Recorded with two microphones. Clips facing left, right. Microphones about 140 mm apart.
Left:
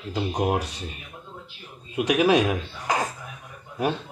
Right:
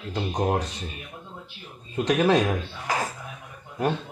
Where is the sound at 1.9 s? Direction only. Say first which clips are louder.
Left 1 dB; 10° left (ahead or behind).